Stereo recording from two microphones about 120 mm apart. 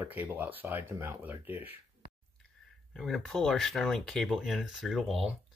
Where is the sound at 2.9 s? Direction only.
Centre (ahead or behind).